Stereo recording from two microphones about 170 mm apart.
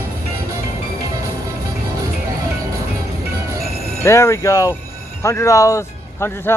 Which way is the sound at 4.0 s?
15° left (ahead or behind).